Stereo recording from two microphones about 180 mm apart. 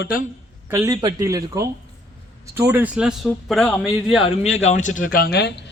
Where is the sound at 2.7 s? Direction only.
10° right (ahead or behind).